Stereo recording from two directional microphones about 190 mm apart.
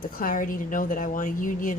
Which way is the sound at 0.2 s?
45° left (ahead or behind).